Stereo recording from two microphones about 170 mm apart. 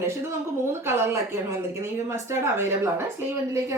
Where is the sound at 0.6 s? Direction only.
15° right (ahead or behind).